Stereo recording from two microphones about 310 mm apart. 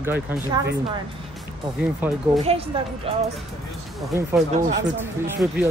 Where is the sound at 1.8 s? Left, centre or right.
Centre.